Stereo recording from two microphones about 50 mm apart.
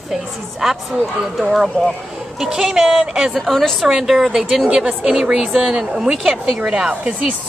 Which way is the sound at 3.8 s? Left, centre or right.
Centre.